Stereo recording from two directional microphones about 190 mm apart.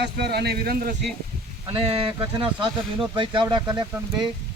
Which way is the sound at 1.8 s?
30° right (ahead or behind).